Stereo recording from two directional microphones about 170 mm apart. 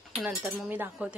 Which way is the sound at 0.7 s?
10° right (ahead or behind).